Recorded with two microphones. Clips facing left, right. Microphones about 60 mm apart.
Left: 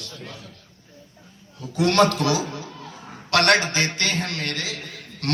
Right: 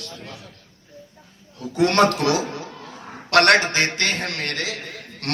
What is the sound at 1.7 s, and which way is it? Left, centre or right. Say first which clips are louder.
A man's voice: right 1 dB; right.